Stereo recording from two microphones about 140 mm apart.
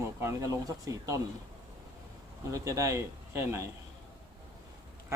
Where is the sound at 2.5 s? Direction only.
25° right (ahead or behind).